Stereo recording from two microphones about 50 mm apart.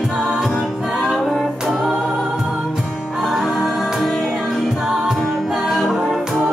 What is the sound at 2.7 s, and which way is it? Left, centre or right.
Music, centre.